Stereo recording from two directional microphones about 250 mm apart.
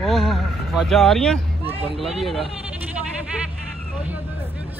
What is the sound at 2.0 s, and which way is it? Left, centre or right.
Speech, centre.